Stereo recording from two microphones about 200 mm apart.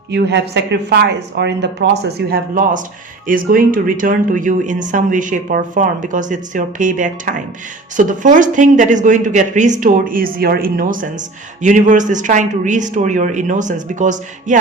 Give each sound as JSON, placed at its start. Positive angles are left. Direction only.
{"t": 0.1, "sound": "speech", "side_deg": -60}